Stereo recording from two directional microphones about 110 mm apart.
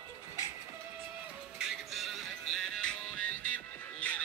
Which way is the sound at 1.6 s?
5° right (ahead or behind).